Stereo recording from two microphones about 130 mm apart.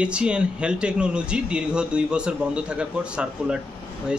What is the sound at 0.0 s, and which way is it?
Speech, 10° right (ahead or behind).